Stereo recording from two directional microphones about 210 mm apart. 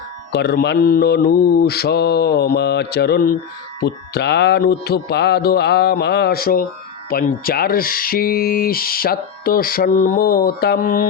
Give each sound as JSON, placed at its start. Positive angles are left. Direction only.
{"t": 0.3, "sound": "speech", "side_deg": 50}